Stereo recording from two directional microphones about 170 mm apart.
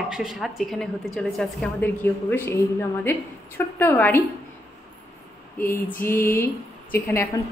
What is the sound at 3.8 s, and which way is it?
Female singing, 10° left (ahead or behind).